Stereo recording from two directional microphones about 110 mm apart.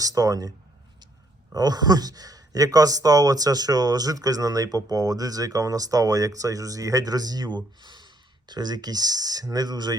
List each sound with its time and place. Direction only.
0.0 s speech: 35° right (ahead or behind)
1.5 s speech: 35° right (ahead or behind)